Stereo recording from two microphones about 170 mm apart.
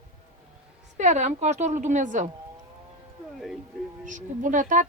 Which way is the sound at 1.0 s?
45° right (ahead or behind).